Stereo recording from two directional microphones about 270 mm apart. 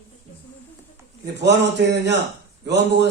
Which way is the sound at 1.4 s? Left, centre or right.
Right.